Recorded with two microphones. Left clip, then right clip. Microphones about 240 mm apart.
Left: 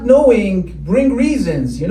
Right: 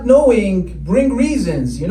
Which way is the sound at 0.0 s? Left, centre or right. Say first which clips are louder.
Left 1 dB; right.